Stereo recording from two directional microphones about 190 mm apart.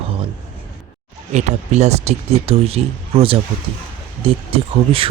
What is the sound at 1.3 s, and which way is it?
Speech, 35° right (ahead or behind).